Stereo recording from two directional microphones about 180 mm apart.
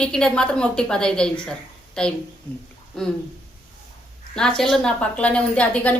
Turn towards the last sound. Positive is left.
turn(degrees=5)  # may be behind; listen again after turning